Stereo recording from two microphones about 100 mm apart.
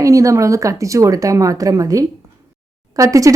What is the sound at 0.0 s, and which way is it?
Speech, 35° right (ahead or behind).